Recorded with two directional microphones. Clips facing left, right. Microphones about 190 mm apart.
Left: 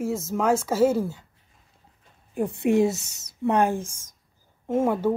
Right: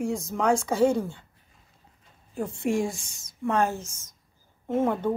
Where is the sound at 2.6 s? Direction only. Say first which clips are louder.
Left 6 dB; 20° left (ahead or behind).